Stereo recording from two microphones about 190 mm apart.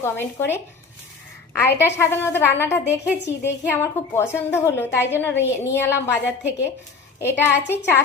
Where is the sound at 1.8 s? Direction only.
10° left (ahead or behind).